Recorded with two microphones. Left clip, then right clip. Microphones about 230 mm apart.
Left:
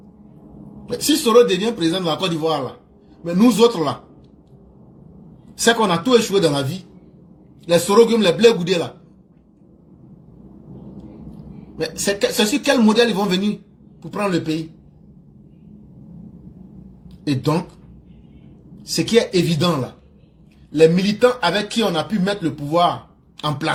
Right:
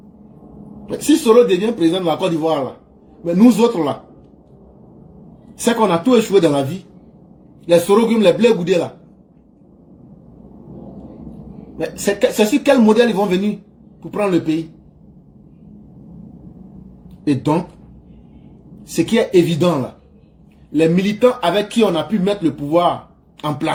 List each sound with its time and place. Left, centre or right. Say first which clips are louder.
1.0 s speech: right 2 dB; left
5.5 s speech: right 1 dB; left
11.9 s speech: right 4 dB; left
17.2 s speech: right 4 dB; left
18.9 s speech: right 3 dB; left
20.7 s speech: left 2 dB; left
23.5 s speech: right 2 dB; left